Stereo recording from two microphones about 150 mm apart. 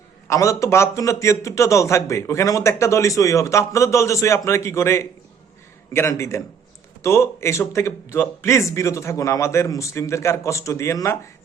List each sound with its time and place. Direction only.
0.3 s a man's voice: 20° left (ahead or behind)